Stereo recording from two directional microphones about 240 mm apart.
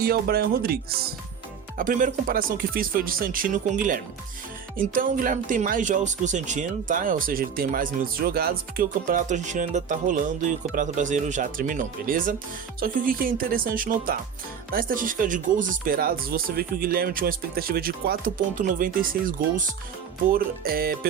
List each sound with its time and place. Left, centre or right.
0.0 s speech: right
20.3 s speech: right